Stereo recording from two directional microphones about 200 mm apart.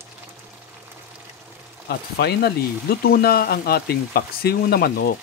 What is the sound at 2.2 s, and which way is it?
Speech, 55° left (ahead or behind).